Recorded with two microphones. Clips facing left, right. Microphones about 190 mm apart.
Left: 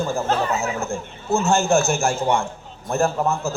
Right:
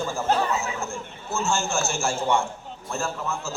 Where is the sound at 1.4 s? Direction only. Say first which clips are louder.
Left 7 dB; 60° left (ahead or behind).